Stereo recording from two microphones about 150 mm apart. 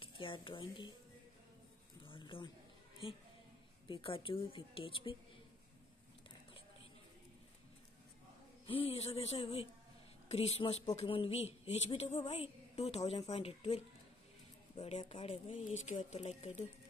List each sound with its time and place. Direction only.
0.0 s speech: 35° left (ahead or behind)
2.0 s a sound: 35° left (ahead or behind)
3.9 s a woman's voice: 35° left (ahead or behind)
8.6 s a woman's voice: 40° left (ahead or behind)
14.8 s speech: 45° left (ahead or behind)
15.1 s a woman's voice: 35° left (ahead or behind)
15.7 s speech: 50° left (ahead or behind)